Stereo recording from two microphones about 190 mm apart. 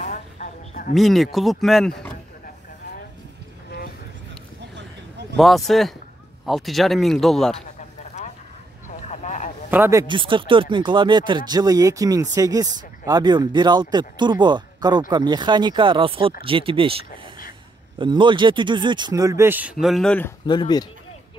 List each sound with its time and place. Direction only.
0.0 s a sound: 40° left (ahead or behind)
0.9 s speech: centre (ahead or behind)
5.4 s speech: centre (ahead or behind)
8.2 s vehicle: 40° left (ahead or behind)
9.7 s speech: 15° right (ahead or behind)
10.1 s speech: 25° right (ahead or behind); by 20.3 s 5° left (ahead or behind)
20.4 s speech: 25° left (ahead or behind)